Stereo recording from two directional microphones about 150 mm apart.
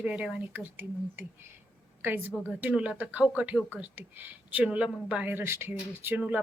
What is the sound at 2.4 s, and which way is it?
Speech, 10° right (ahead or behind).